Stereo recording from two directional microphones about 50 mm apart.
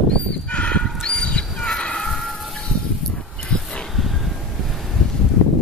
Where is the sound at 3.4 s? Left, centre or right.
Centre.